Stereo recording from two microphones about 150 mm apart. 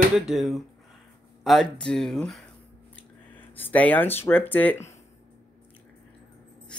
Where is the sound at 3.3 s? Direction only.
10° left (ahead or behind).